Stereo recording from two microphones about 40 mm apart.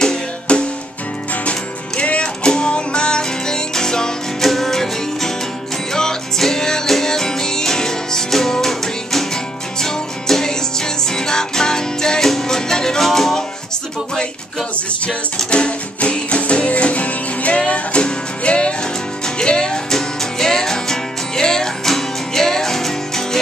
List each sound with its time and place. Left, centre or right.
0.5 s music: left; by 13.4 s centre
15.0 s music: left